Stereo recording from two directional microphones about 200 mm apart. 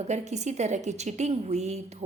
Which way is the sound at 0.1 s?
35° right (ahead or behind).